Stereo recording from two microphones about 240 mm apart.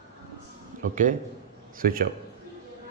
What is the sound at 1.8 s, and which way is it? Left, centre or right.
Speech, right.